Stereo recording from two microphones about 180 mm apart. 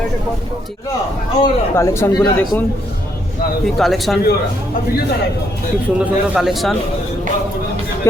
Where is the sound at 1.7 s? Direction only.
15° left (ahead or behind).